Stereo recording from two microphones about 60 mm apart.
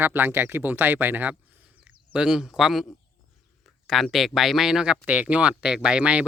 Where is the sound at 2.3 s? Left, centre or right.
Centre.